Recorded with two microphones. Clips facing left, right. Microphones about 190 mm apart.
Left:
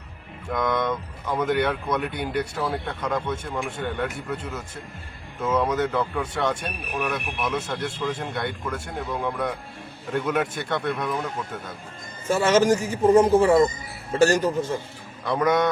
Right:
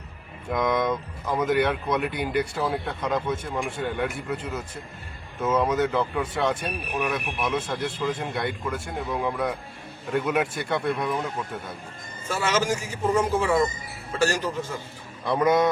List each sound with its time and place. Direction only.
0.4 s speech: 5° right (ahead or behind)
12.3 s a man's voice: 40° left (ahead or behind)
15.3 s speech: 5° right (ahead or behind)